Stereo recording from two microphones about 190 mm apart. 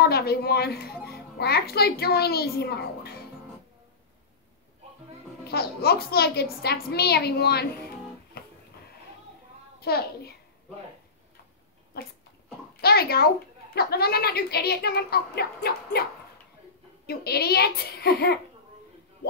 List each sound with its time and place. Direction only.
0.0 s a woman's voice: 55° left (ahead or behind)
5.4 s a woman's voice: 55° left (ahead or behind)
8.3 s music: 55° left (ahead or behind)
9.8 s a child's voice: 55° left (ahead or behind)
11.9 s a woman's voice: 55° left (ahead or behind)